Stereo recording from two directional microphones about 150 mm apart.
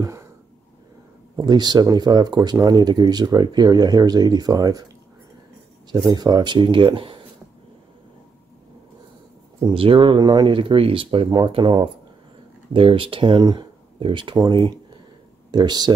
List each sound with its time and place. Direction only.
1.3 s speech: 30° right (ahead or behind)
5.9 s speech: 25° right (ahead or behind)
9.7 s speech: 35° right (ahead or behind)